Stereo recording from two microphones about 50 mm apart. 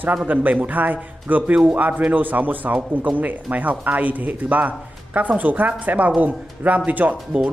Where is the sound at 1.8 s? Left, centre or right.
Right.